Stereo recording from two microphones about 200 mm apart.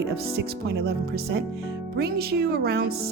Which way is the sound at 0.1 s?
55° right (ahead or behind).